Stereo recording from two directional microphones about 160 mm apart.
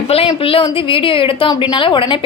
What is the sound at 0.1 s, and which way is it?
A woman's voice, 35° left (ahead or behind).